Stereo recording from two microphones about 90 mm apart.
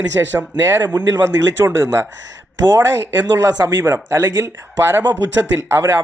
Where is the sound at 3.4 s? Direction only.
45° right (ahead or behind).